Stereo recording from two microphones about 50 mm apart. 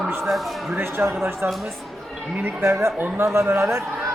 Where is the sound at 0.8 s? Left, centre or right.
Right.